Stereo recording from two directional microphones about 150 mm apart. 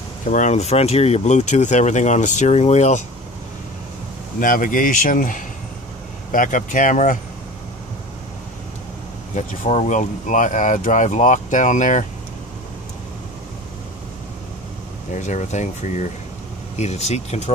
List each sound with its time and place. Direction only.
0.3 s speech: 50° left (ahead or behind)
4.4 s speech: 65° left (ahead or behind)
9.3 s speech: 55° left (ahead or behind)
15.0 s speech: 55° left (ahead or behind)